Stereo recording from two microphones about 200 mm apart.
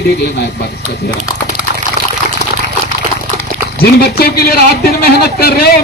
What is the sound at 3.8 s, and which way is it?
Speech, 50° left (ahead or behind).